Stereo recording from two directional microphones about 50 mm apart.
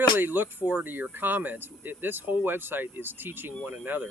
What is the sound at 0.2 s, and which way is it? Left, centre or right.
Speech, right.